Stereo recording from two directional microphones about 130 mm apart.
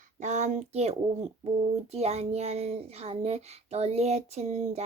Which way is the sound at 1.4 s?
55° right (ahead or behind).